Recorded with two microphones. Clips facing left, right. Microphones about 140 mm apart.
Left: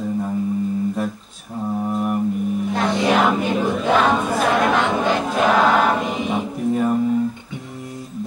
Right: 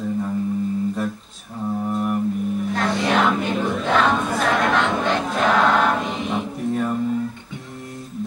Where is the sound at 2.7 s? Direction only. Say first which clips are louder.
Left 2 dB; 15° left (ahead or behind).